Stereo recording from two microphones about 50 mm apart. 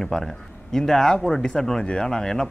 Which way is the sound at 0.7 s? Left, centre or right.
Centre.